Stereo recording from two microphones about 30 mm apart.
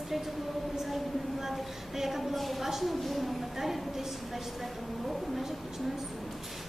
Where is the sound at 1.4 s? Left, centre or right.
Centre.